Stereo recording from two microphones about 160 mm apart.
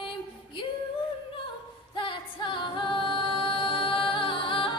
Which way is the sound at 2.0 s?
30° left (ahead or behind).